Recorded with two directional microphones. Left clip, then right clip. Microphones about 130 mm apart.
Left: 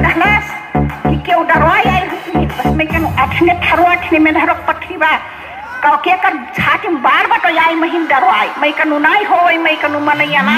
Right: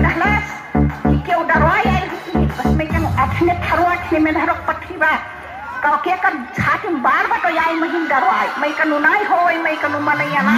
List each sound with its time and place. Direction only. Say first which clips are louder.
0.0 s music: left 5 dB; 40° left (ahead or behind)
6.6 s a woman's voice: left 4 dB; 35° left (ahead or behind)